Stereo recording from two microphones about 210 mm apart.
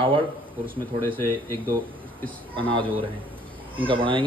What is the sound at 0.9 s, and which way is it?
Speech, 10° left (ahead or behind).